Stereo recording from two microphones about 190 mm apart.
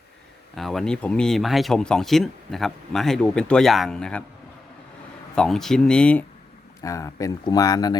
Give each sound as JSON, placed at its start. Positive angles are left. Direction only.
{"t": 0.5, "sound": "speech", "side_deg": 0}
{"t": 5.3, "sound": "speech", "side_deg": 5}
{"t": 6.8, "sound": "speech", "side_deg": 15}